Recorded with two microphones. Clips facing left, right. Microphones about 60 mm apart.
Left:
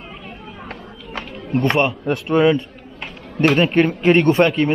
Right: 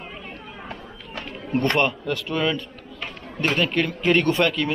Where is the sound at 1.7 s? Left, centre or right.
Centre.